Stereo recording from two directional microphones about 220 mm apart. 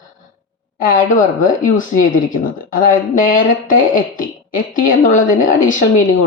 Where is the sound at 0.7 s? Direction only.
40° left (ahead or behind).